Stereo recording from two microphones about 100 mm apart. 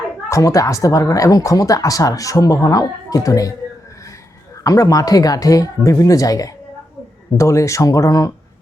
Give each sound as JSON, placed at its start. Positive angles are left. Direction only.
{"t": 0.3, "sound": "speech", "side_deg": 35}
{"t": 4.6, "sound": "speech", "side_deg": 40}